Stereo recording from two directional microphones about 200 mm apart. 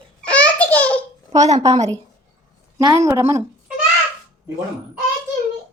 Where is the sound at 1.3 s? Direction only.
35° right (ahead or behind).